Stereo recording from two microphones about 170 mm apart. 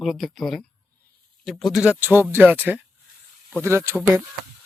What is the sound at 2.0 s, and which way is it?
Speech, 10° right (ahead or behind).